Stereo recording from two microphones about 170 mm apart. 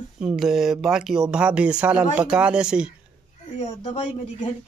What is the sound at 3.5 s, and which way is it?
Speech, 40° left (ahead or behind).